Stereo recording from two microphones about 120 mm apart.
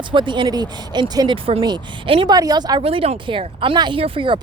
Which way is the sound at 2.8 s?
50° right (ahead or behind).